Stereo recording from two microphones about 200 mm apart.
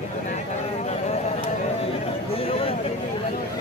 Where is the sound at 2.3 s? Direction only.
30° left (ahead or behind).